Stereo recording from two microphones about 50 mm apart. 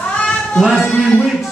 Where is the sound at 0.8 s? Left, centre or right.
Left.